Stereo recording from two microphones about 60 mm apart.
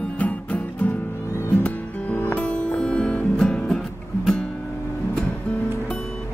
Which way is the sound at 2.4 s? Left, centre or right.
Centre.